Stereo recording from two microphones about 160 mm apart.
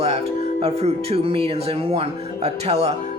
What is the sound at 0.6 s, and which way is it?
A man's voice, 40° right (ahead or behind).